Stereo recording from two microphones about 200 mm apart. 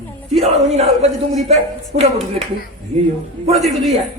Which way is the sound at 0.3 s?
30° right (ahead or behind).